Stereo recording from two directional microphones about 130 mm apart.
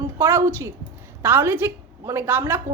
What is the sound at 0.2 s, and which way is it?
A woman's voice, 20° right (ahead or behind).